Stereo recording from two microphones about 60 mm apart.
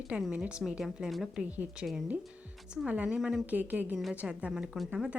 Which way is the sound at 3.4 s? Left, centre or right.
Right.